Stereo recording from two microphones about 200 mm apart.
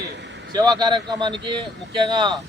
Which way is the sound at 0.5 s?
20° right (ahead or behind).